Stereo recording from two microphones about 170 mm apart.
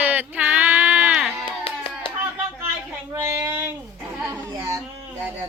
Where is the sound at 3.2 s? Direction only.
15° right (ahead or behind).